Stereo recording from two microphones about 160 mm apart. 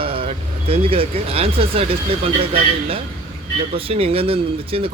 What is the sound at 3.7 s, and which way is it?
Speech, 35° right (ahead or behind).